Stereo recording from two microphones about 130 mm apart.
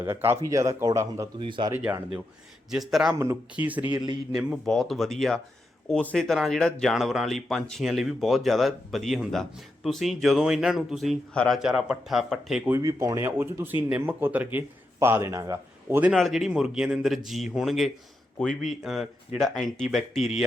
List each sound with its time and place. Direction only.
0.0 s speech: 20° right (ahead or behind)
1.4 s speech: 40° right (ahead or behind)
1.7 s speech: 15° right (ahead or behind)
2.6 s speech: centre (ahead or behind)
3.5 s speech: 10° right (ahead or behind)
3.9 s speech: 35° right (ahead or behind)
4.3 s speech: 5° right (ahead or behind)
12.7 s a man's voice: 25° right (ahead or behind)
16.1 s speech: centre (ahead or behind)